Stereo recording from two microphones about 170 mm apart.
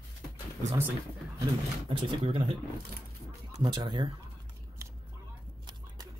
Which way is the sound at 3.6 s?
25° right (ahead or behind).